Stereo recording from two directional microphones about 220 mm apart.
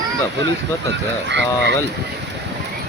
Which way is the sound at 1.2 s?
55° right (ahead or behind).